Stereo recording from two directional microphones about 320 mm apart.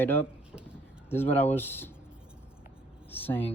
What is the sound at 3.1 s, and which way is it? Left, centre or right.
Speech, centre.